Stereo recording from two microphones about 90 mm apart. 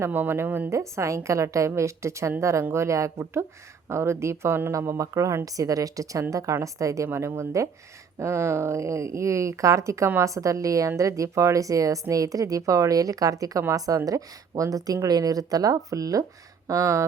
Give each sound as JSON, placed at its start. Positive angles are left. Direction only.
{"t": 0.0, "sound": "a woman's voice", "side_deg": -25}
{"t": 0.7, "sound": "speech", "side_deg": -35}